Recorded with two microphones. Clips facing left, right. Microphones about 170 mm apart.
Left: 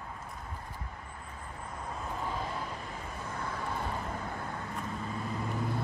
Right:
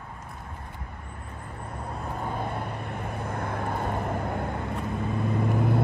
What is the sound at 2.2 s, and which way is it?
Vehicle, 55° right (ahead or behind).